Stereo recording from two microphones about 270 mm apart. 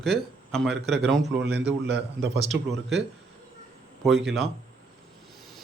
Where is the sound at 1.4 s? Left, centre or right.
Right.